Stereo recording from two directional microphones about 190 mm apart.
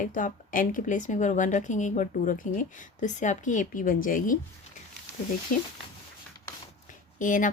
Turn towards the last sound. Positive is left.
turn(degrees=45)  # may be behind; listen again after turning